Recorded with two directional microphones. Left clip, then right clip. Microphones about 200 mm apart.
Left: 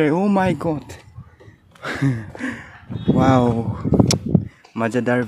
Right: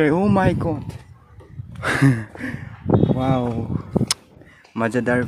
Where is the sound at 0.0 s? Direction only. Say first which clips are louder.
Even; 5° right (ahead or behind).